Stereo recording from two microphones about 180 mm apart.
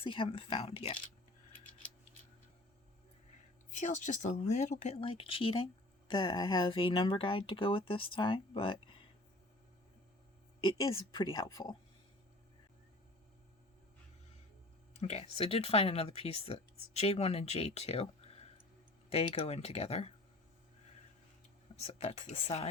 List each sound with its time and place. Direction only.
0.0 s speech: 30° left (ahead or behind)
3.7 s speech: 45° left (ahead or behind)
10.6 s speech: 25° left (ahead or behind)
15.0 s speech: 35° left (ahead or behind)
21.8 s speech: 35° left (ahead or behind)